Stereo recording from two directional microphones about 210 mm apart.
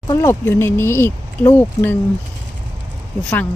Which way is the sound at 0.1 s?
15° left (ahead or behind).